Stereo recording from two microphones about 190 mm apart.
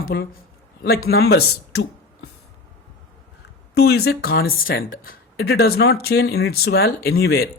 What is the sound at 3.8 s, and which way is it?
Speech, 55° left (ahead or behind).